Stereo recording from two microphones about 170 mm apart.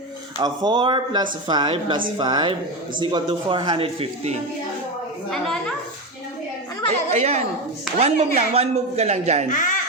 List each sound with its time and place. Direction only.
0.3 s speech: 25° right (ahead or behind)
5.3 s a woman's voice: 5° left (ahead or behind)
7.1 s speech: 40° right (ahead or behind)
9.5 s speech: 50° left (ahead or behind)